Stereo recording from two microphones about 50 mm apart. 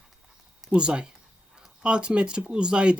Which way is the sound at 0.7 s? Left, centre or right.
Centre.